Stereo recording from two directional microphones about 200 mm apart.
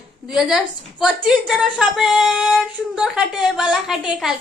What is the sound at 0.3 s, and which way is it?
A woman's voice, centre (ahead or behind).